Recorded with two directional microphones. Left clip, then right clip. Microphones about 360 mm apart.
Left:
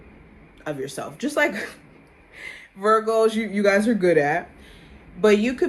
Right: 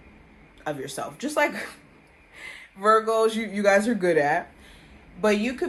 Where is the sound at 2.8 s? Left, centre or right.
Centre.